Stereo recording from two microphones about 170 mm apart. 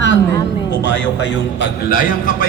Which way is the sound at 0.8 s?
90° left.